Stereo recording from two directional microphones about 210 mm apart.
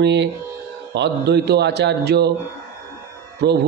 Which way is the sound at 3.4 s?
50° right (ahead or behind).